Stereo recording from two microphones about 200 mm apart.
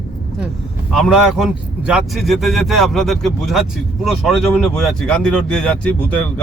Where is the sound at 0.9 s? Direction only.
Centre (ahead or behind).